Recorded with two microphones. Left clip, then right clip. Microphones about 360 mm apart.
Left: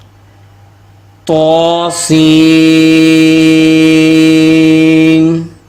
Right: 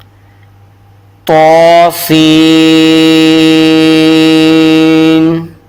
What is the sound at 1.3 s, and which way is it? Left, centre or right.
Speech, right.